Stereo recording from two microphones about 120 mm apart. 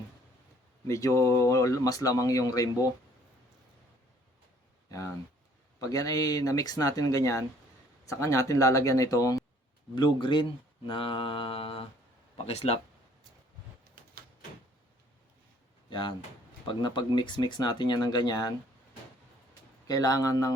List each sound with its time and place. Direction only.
0.9 s speech: 25° left (ahead or behind)
5.8 s speech: 30° left (ahead or behind)
9.9 s speech: 40° left (ahead or behind)
10.8 s mantra: 45° left (ahead or behind)
12.5 s speech: 60° left (ahead or behind)
15.9 s speech: 40° left (ahead or behind)
19.9 s speech: 30° left (ahead or behind)